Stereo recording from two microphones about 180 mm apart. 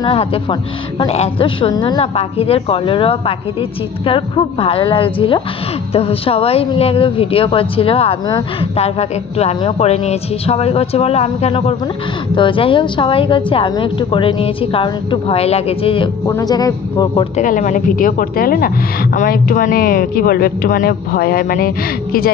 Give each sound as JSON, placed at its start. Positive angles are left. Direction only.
{"t": 0.0, "sound": "a woman's voice", "side_deg": 30}
{"t": 16.3, "sound": "a woman's voice", "side_deg": 20}
{"t": 17.4, "sound": "a woman's voice", "side_deg": 45}